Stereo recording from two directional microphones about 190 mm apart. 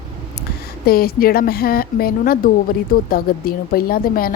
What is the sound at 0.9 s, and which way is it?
A woman's voice, 50° left (ahead or behind).